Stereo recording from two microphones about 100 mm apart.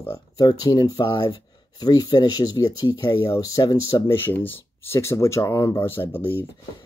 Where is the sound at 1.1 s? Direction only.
50° left (ahead or behind).